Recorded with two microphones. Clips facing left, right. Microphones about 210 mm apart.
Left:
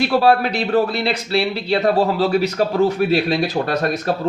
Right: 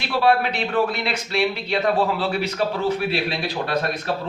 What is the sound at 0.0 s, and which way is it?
Speech, 40° left (ahead or behind).